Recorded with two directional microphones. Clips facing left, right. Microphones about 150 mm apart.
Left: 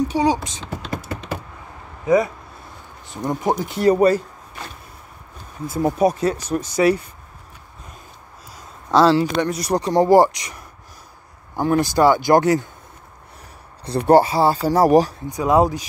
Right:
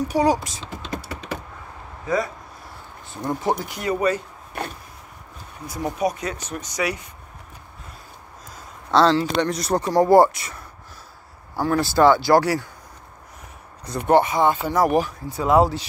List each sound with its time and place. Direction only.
0.8 s typing: 35° left (ahead or behind)
3.1 s speech: 20° left (ahead or behind)
3.7 s speech: 35° left (ahead or behind)
4.6 s a sound: 60° right (ahead or behind)
5.7 s speech: 30° left (ahead or behind)
8.9 s speech: 10° left (ahead or behind)
13.8 s speech: 35° left (ahead or behind)
15.2 s speech: 15° left (ahead or behind)